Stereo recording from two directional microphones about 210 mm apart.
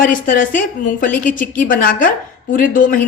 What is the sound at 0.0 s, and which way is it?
A woman's voice, 40° left (ahead or behind).